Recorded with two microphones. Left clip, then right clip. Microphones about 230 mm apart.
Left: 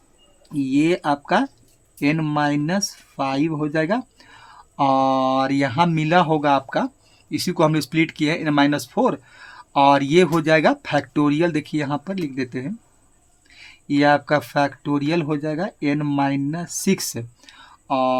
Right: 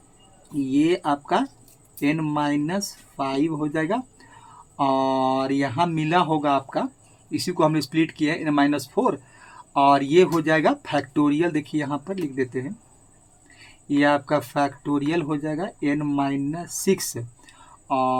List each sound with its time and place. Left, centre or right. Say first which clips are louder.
0.7 s speech: left 2 dB; left
13.8 s speech: left 3 dB; left